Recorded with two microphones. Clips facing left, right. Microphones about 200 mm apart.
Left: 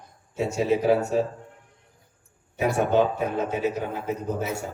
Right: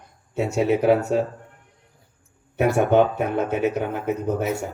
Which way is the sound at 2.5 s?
60° right (ahead or behind).